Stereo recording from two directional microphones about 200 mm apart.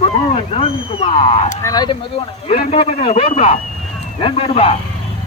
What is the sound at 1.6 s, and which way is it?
Speech, 20° left (ahead or behind).